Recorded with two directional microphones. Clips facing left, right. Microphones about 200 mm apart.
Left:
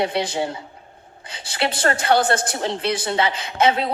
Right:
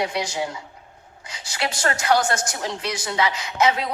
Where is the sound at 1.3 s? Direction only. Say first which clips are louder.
Left 4 dB; 30° left (ahead or behind).